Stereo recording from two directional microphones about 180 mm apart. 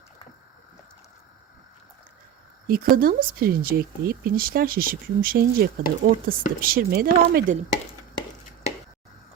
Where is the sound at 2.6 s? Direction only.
55° right (ahead or behind).